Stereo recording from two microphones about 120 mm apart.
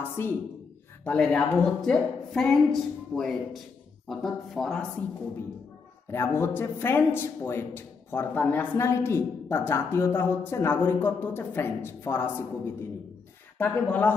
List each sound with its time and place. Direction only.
1.0 s a woman's voice: 10° left (ahead or behind)
6.0 s a man's voice: 20° left (ahead or behind)